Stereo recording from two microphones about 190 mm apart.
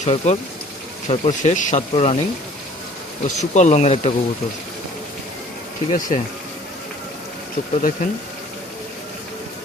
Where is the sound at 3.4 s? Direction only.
40° left (ahead or behind).